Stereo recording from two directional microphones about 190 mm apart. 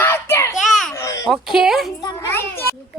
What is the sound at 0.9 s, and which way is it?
Speech, 15° left (ahead or behind).